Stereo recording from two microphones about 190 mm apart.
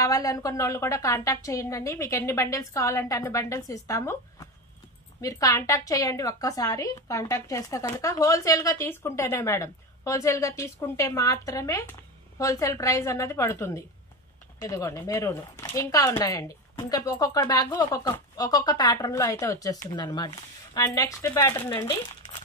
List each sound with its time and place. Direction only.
0.0 s a woman's voice: 20° left (ahead or behind)